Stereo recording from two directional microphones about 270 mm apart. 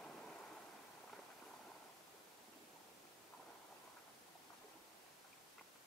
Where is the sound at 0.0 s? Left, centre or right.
Centre.